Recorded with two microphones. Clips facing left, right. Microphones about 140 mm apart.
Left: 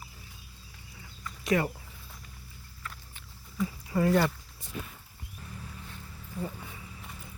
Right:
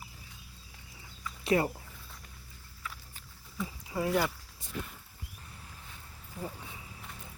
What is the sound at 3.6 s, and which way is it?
Speech, 10° right (ahead or behind).